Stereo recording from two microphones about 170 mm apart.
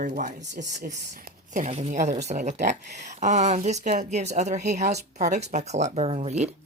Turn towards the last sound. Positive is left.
turn(degrees=-40)  # may be behind; listen again after turning